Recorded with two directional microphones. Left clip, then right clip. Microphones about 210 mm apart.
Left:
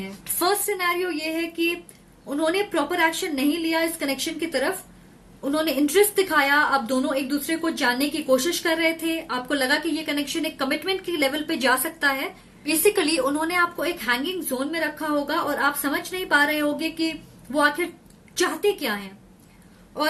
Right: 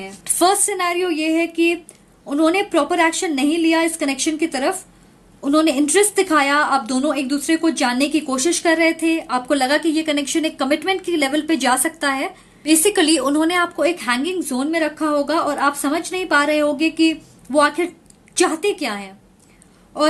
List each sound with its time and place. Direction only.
0.3 s a woman's voice: 45° right (ahead or behind)